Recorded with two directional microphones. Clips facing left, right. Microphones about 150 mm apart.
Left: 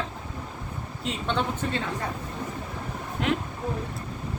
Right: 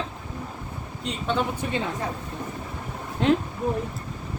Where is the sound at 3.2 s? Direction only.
30° right (ahead or behind).